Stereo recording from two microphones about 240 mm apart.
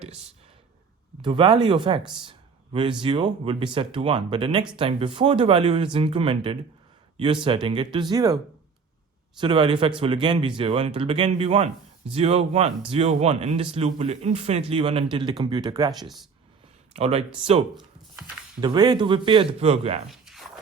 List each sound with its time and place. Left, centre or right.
0.0 s a sound: right
1.2 s speech: centre
3.0 s speech: right
9.4 s speech: centre
16.9 s speech: right
18.6 s speech: centre
20.1 s a sound: centre